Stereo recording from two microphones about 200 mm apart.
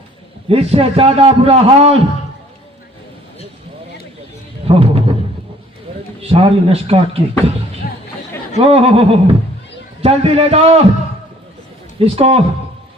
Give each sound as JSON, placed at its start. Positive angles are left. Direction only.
{"t": 0.4, "sound": "a man's voice", "side_deg": -30}
{"t": 4.7, "sound": "music", "side_deg": -30}
{"t": 5.9, "sound": "a sound", "side_deg": -30}
{"t": 6.2, "sound": "a man's voice", "side_deg": -30}
{"t": 7.8, "sound": "music", "side_deg": 50}
{"t": 8.5, "sound": "a man's voice", "side_deg": -30}
{"t": 11.9, "sound": "a man's voice", "side_deg": -30}